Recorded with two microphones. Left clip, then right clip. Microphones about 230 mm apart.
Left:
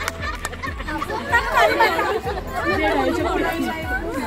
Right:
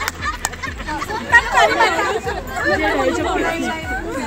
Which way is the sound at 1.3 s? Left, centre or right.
Centre.